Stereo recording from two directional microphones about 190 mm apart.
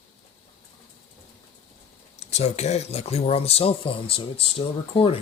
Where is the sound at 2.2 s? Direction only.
35° left (ahead or behind).